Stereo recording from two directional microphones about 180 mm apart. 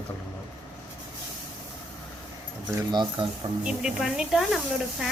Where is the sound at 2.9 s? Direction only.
25° right (ahead or behind).